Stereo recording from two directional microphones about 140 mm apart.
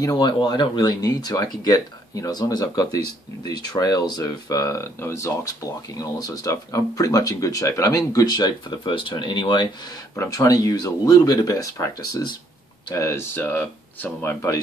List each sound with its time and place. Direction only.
0.0 s speech: 30° left (ahead or behind); by 14.3 s 10° left (ahead or behind)